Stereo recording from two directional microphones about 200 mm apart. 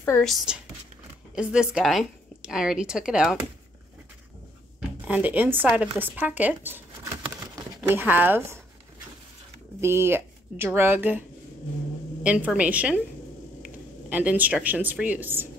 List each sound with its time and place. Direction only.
0.2 s a woman's voice: centre (ahead or behind)
5.0 s speech: 10° right (ahead or behind)
7.3 s a sound: 10° right (ahead or behind)
9.8 s speech: 10° right (ahead or behind)